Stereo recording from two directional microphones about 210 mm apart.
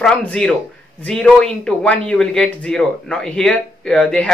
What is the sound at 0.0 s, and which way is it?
Speech, 5° left (ahead or behind).